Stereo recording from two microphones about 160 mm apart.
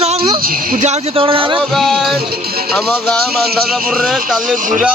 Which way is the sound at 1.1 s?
35° right (ahead or behind).